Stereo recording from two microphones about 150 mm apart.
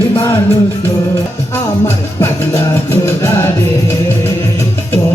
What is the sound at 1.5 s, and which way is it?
Music, 15° left (ahead or behind).